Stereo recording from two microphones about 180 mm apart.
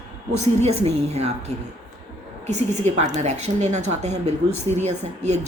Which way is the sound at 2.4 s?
40° right (ahead or behind).